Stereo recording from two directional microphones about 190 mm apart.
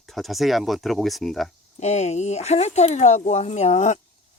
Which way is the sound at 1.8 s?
35° left (ahead or behind).